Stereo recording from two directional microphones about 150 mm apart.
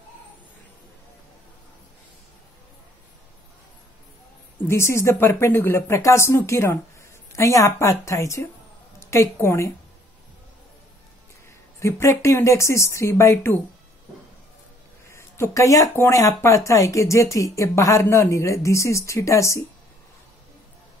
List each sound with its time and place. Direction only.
4.6 s speech: 15° left (ahead or behind)
11.8 s speech: 20° left (ahead or behind)
15.0 s speech: 20° left (ahead or behind)